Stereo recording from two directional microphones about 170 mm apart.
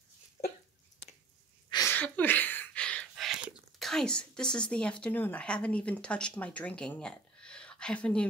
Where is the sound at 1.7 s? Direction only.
20° left (ahead or behind).